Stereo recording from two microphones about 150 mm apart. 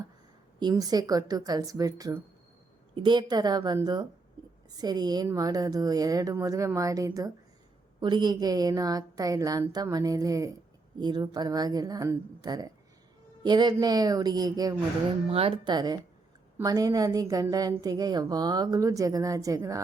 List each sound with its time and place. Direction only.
0.6 s a woman's voice: 25° right (ahead or behind)
4.8 s a woman's voice: 25° right (ahead or behind)
15.3 s speech: 40° right (ahead or behind)
15.7 s a woman's voice: 25° right (ahead or behind)